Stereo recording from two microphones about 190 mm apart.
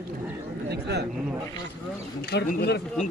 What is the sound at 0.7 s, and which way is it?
Speech, 60° right (ahead or behind).